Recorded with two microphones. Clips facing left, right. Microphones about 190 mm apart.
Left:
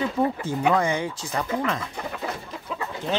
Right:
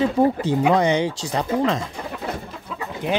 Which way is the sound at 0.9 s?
75° right (ahead or behind).